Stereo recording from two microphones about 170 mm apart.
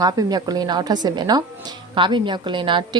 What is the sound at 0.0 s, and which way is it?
Speech, 25° right (ahead or behind).